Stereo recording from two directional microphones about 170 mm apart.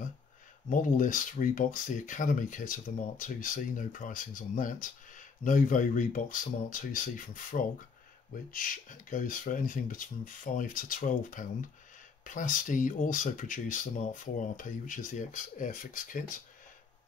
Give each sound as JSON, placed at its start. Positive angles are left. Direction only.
{"t": 0.7, "sound": "speech", "side_deg": 50}